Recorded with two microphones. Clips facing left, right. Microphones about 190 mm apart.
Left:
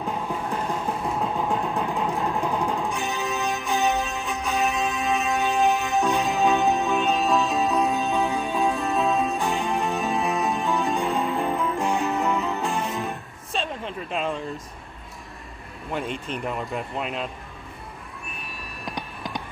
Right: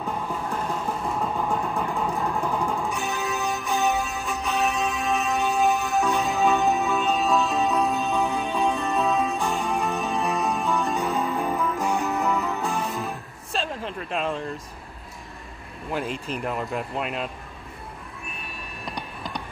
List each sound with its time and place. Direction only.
0.0 s a sound: 10° left (ahead or behind)
2.0 s music: centre (ahead or behind)
2.4 s music: 15° left (ahead or behind)
2.7 s music: centre (ahead or behind)
3.6 s music: 15° left (ahead or behind)
4.0 s music: centre (ahead or behind)
6.9 s music: 15° left (ahead or behind)
7.2 s music: centre (ahead or behind)
12.3 s music: 15° left (ahead or behind)
12.5 s music: centre (ahead or behind)
15.9 s speech: centre (ahead or behind)